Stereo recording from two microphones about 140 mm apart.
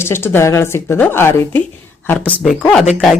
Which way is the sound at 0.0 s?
15° left (ahead or behind).